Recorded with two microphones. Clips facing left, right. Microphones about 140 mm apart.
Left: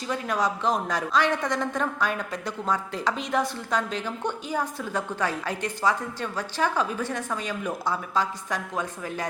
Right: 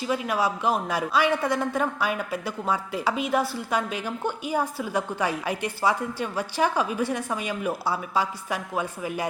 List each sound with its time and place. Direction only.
0.0 s a woman's voice: 10° right (ahead or behind)